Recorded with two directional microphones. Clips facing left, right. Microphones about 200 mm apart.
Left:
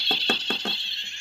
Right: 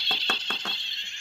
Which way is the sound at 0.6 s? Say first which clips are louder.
Left 7 dB; 30° left (ahead or behind).